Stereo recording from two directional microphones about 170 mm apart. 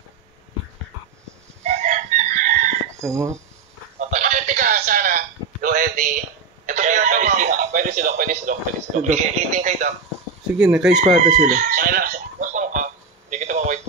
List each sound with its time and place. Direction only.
1.6 s chicken: 45° right (ahead or behind)
2.9 s speech: 15° right (ahead or behind)
4.0 s a sound: 45° right (ahead or behind)
6.6 s speech: 45° right (ahead or behind)
10.5 s speech: 5° right (ahead or behind)
11.4 s chicken: 50° right (ahead or behind)
13.3 s a sound: 45° right (ahead or behind)